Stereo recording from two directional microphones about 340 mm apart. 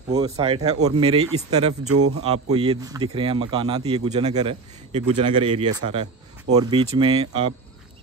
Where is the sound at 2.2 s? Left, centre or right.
Centre.